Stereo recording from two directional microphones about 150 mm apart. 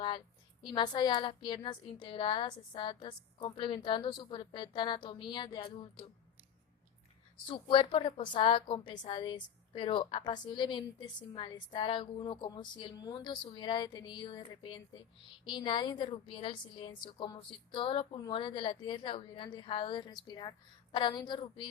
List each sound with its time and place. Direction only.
0.6 s a woman's voice: 30° left (ahead or behind)
7.4 s a woman's voice: 35° left (ahead or behind)